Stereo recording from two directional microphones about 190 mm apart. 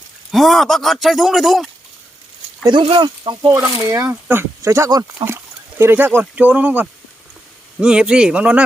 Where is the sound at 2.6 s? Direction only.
25° right (ahead or behind).